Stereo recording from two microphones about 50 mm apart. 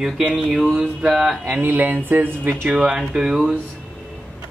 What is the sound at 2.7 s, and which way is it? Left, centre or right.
Speech, right.